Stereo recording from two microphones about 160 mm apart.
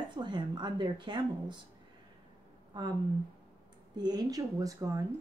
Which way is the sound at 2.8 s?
30° right (ahead or behind).